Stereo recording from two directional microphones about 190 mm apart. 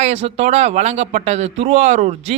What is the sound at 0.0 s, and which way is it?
Speech, 35° right (ahead or behind).